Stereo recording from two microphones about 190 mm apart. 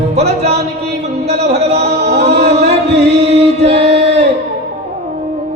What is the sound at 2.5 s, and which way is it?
Music, 35° right (ahead or behind).